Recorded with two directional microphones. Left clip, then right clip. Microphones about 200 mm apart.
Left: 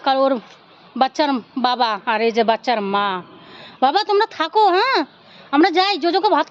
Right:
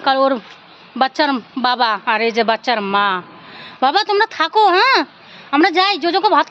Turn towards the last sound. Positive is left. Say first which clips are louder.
# right 3 dB
turn(degrees=5)  # may be behind; listen again after turning